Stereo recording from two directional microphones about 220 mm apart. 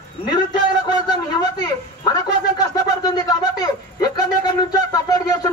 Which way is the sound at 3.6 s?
15° left (ahead or behind).